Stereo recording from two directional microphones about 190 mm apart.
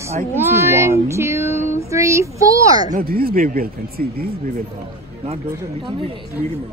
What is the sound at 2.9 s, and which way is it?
Speech, 50° right (ahead or behind).